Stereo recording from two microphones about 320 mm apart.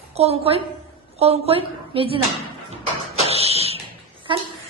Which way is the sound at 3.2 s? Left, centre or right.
Centre.